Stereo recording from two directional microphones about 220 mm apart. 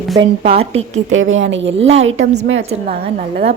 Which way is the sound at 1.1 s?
60° right (ahead or behind).